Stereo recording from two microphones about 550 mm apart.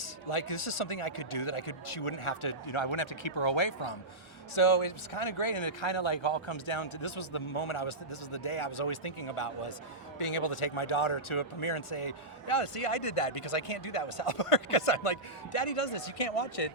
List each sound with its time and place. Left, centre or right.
0.0 s speech: left